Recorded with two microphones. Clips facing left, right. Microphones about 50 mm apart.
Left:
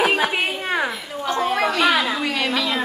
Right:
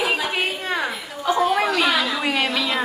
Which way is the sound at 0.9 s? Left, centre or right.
Centre.